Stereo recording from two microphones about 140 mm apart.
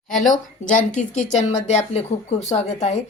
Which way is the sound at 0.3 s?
70° left (ahead or behind).